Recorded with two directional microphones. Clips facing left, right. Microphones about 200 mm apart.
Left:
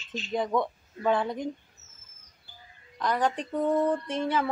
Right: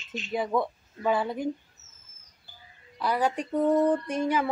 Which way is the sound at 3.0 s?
10° right (ahead or behind).